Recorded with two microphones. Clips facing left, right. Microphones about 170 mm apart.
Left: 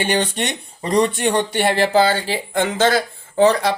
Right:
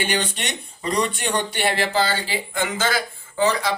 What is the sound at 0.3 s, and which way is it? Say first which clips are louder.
Speech: left 6 dB; 30° left (ahead or behind).